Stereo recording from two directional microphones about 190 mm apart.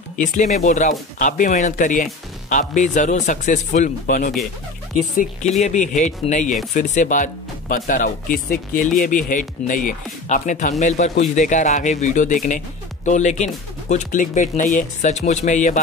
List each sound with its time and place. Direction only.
0.2 s speech: 40° left (ahead or behind)
5.6 s speech: 40° left (ahead or behind)